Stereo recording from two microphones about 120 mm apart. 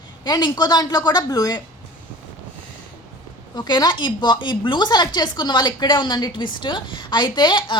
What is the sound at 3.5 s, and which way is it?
A woman's voice, 35° left (ahead or behind).